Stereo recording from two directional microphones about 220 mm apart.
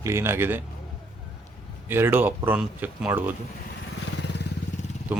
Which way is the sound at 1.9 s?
10° right (ahead or behind).